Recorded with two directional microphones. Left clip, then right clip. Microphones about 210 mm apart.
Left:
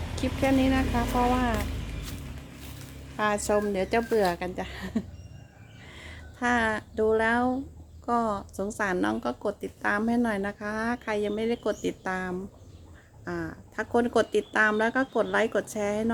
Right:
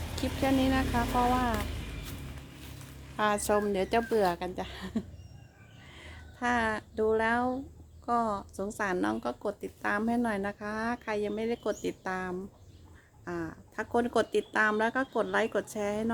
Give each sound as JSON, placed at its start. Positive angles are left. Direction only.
{"t": 0.2, "sound": "speech", "side_deg": -20}
{"t": 3.2, "sound": "a woman's voice", "side_deg": -20}